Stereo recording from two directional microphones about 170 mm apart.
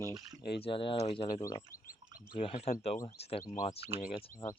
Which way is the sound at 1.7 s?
20° left (ahead or behind).